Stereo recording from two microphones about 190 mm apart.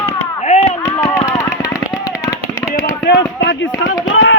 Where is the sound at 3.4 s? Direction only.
75° left (ahead or behind).